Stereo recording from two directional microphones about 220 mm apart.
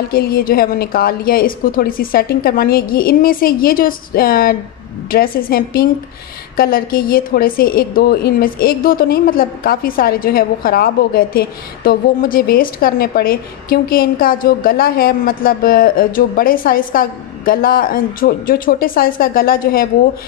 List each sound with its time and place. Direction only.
0.1 s a woman's voice: 40° left (ahead or behind)